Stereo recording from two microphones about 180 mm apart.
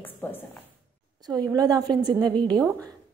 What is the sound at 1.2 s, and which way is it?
A woman's voice, 20° right (ahead or behind).